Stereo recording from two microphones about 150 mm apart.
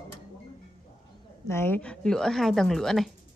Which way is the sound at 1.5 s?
15° left (ahead or behind).